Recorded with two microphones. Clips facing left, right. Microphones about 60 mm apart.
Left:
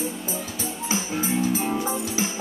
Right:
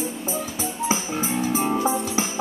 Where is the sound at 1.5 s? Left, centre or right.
Right.